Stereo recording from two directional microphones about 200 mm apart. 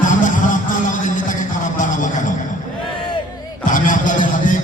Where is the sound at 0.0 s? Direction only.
40° left (ahead or behind).